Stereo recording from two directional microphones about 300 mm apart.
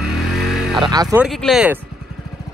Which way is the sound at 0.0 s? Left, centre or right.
Centre.